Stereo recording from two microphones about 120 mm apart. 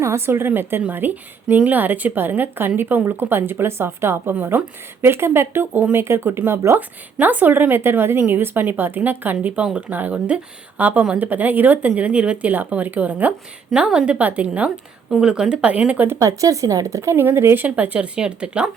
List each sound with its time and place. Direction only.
0.0 s speech: 20° right (ahead or behind)